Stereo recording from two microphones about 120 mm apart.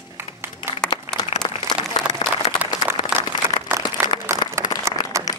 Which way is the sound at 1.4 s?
40° left (ahead or behind).